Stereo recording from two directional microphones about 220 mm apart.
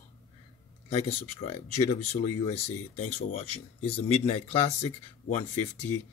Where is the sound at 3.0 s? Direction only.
30° left (ahead or behind).